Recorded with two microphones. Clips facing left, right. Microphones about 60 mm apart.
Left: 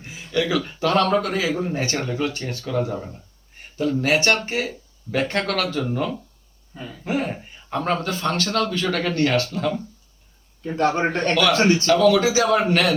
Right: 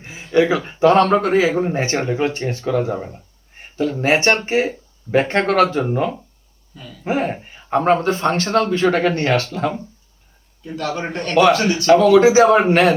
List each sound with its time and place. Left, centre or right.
0.0 s a man's voice: right
6.7 s a man's voice: left
7.0 s a man's voice: right
10.6 s a man's voice: left
11.9 s a man's voice: right